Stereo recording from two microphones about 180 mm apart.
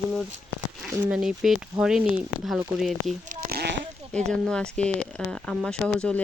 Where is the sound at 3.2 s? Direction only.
55° right (ahead or behind).